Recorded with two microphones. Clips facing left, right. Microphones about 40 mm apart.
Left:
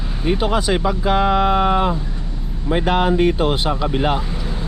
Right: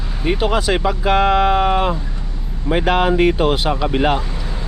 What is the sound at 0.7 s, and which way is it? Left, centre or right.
Speech, right.